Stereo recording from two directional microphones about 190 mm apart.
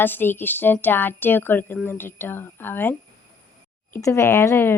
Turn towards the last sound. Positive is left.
turn(degrees=15)  # may be behind; listen again after turning